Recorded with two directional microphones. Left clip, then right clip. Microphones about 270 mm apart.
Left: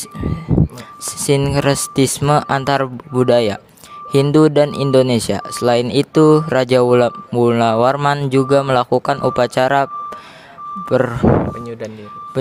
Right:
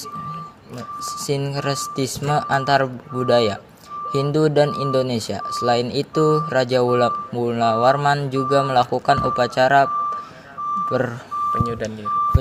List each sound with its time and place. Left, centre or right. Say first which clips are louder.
1.0 s speech: left 8 dB; left